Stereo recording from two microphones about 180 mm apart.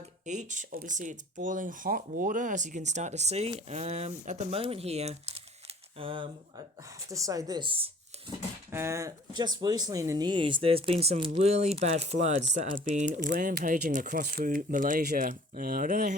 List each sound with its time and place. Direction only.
0.3 s speech: 40° right (ahead or behind)
7.1 s speech: 20° right (ahead or behind)
8.7 s speech: 15° right (ahead or behind); by 16.1 s 50° right (ahead or behind)